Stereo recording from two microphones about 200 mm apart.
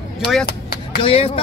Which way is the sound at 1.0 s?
30° left (ahead or behind).